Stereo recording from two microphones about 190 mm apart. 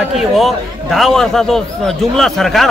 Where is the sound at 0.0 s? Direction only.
Centre (ahead or behind).